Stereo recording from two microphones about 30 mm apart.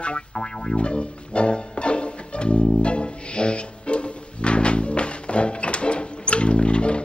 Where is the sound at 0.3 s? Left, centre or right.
Left.